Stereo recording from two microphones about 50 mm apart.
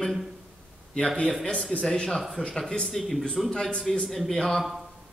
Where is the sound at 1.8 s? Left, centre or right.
Centre.